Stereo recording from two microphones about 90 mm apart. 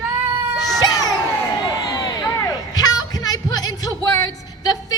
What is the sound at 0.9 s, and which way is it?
Crowd, 45° left (ahead or behind).